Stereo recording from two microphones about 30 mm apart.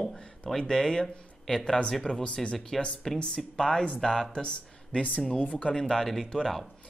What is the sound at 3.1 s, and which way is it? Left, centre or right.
Speech, left.